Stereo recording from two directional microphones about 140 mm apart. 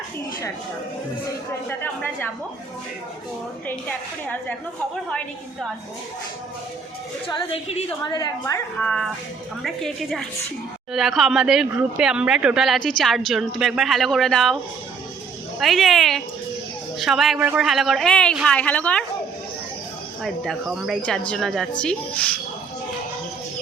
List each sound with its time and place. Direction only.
1.8 s a woman's voice: 15° left (ahead or behind)
3.7 s a woman's voice: 10° left (ahead or behind)
7.3 s a woman's voice: 30° left (ahead or behind)
8.8 s a woman's voice: 5° left (ahead or behind)
20.2 s a woman's voice: centre (ahead or behind)